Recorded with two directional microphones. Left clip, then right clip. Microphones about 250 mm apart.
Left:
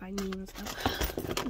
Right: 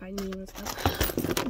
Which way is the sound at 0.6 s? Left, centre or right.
Right.